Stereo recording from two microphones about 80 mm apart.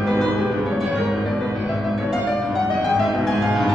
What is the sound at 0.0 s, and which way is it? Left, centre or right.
Music, centre.